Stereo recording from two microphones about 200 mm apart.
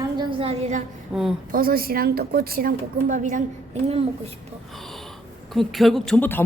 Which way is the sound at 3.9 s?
30° right (ahead or behind).